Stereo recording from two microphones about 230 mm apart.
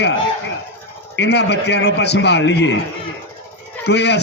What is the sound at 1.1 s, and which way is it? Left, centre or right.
A man's voice, left.